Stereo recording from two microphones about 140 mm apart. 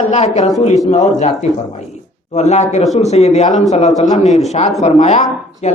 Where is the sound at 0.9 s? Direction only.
55° left (ahead or behind).